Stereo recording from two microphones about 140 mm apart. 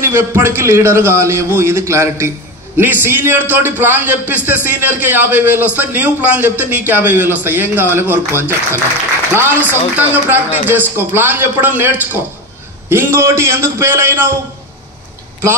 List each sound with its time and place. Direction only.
0.0 s a man's voice: 15° right (ahead or behind)